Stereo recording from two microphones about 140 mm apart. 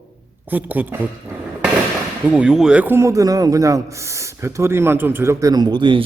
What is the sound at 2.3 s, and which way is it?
Speech, 5° right (ahead or behind).